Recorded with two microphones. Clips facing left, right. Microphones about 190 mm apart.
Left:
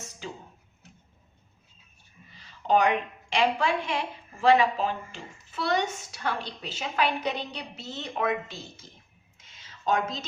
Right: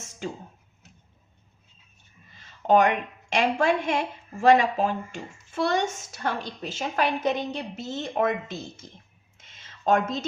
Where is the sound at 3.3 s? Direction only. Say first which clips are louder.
Right 3 dB; 45° right (ahead or behind).